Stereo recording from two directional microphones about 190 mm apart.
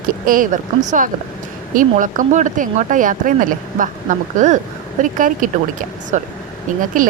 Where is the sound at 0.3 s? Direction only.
45° right (ahead or behind).